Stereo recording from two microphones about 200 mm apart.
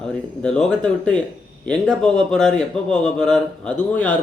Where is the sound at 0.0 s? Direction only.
5° left (ahead or behind).